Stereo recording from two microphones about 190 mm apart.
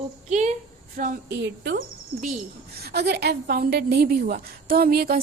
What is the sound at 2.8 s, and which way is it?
A woman's voice, 60° right (ahead or behind).